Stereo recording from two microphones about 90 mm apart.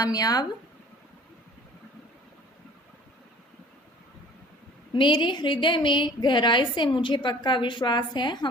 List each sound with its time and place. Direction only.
0.0 s speech: 45° left (ahead or behind)
4.9 s a woman's voice: 65° left (ahead or behind)